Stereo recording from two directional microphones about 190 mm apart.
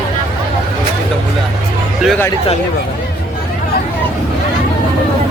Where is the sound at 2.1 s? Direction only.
10° left (ahead or behind).